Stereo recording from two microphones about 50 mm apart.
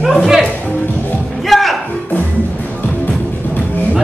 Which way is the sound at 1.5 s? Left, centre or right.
Centre.